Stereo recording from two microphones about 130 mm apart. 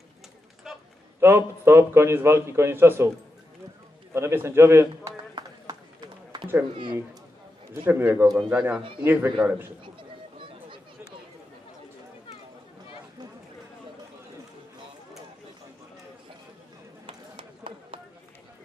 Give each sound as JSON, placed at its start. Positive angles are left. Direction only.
{"t": 1.2, "sound": "a man's voice", "side_deg": -20}
{"t": 4.1, "sound": "a man's voice", "side_deg": -20}
{"t": 5.3, "sound": "run", "side_deg": -30}
{"t": 7.7, "sound": "a man's voice", "side_deg": -15}
{"t": 9.9, "sound": "a sound", "side_deg": -40}
{"t": 17.0, "sound": "run", "side_deg": -40}